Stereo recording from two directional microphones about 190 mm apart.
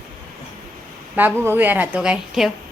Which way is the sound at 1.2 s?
10° right (ahead or behind).